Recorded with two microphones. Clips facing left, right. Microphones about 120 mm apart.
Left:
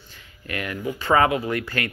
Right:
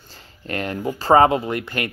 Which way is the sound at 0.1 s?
35° right (ahead or behind).